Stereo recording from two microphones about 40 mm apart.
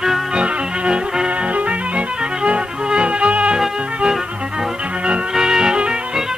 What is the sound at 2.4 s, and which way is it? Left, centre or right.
Music, right.